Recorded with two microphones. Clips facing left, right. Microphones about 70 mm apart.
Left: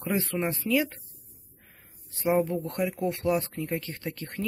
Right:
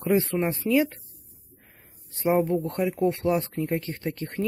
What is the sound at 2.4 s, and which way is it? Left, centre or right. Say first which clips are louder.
Speech: right 4 dB; right.